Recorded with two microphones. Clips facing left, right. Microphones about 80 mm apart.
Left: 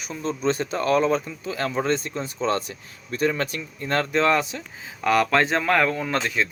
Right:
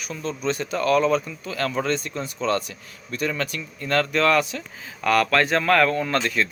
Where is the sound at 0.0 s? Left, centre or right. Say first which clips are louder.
Left 2 dB; left.